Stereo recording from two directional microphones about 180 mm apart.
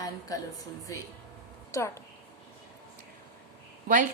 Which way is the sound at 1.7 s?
15° left (ahead or behind).